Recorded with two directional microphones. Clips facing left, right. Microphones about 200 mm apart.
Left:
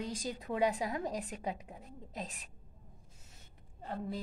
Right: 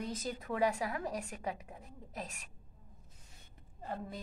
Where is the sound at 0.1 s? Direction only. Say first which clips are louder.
Left 1 dB; 15° left (ahead or behind).